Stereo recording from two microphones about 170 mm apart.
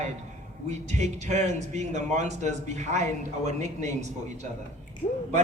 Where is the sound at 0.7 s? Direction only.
40° right (ahead or behind).